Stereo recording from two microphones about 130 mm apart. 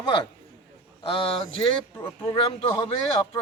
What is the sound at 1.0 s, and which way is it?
A man's voice, 40° left (ahead or behind).